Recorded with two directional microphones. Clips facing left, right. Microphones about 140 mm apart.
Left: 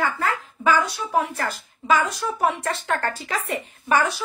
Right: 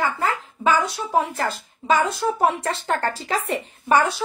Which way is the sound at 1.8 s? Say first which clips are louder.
Right 2 dB; 25° right (ahead or behind).